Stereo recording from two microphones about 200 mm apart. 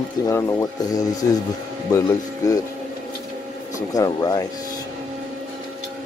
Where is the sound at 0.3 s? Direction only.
15° left (ahead or behind).